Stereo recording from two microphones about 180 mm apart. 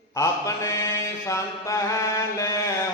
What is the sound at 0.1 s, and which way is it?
Mantra, 15° left (ahead or behind).